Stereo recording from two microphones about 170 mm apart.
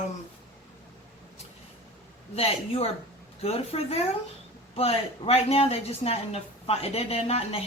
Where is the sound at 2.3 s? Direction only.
35° left (ahead or behind).